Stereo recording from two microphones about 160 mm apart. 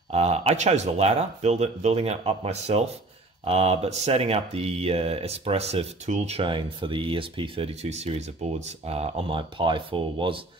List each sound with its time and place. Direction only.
0.1 s speech: 40° right (ahead or behind)